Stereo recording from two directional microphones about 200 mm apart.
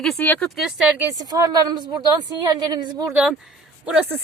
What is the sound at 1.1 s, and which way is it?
A woman's voice, 20° right (ahead or behind).